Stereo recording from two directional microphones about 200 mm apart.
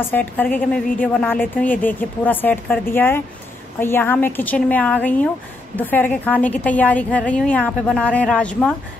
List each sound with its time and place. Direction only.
0.1 s speech: 10° left (ahead or behind)